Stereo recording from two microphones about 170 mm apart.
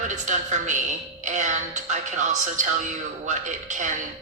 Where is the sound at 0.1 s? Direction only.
45° right (ahead or behind).